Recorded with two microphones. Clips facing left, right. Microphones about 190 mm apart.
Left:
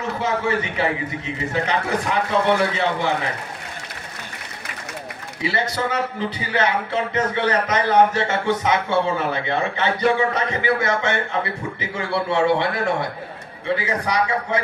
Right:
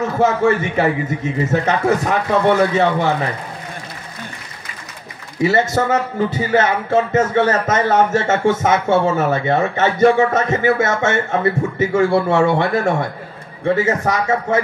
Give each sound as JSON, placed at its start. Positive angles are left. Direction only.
{"t": 0.2, "sound": "speech", "side_deg": -45}
{"t": 5.4, "sound": "speech", "side_deg": -45}